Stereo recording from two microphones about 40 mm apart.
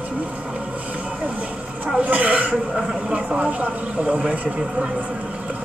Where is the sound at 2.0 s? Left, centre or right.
Right.